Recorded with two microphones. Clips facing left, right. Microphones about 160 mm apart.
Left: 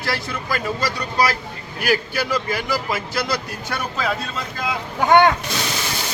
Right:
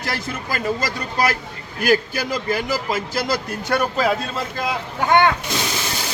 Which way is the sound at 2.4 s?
45° right (ahead or behind).